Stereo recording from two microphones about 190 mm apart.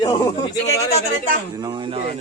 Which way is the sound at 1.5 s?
20° right (ahead or behind).